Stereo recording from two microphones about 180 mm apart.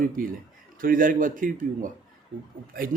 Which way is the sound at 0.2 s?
50° right (ahead or behind).